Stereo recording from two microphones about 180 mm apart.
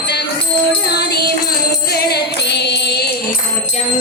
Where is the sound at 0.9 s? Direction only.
65° left (ahead or behind).